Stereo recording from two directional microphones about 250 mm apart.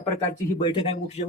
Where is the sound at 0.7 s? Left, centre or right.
Left.